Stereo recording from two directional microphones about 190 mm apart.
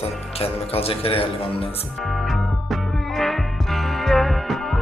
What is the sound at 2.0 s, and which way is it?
Music, centre (ahead or behind).